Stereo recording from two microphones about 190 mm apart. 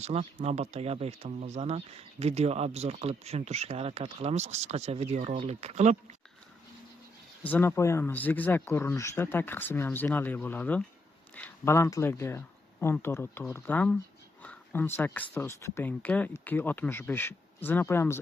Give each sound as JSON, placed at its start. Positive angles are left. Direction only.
{"t": 0.0, "sound": "speech", "side_deg": -35}
{"t": 7.4, "sound": "speech", "side_deg": 10}